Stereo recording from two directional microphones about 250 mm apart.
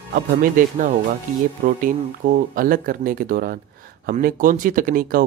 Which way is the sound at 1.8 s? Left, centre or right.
Right.